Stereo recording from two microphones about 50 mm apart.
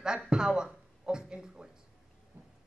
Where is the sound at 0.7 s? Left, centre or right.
Centre.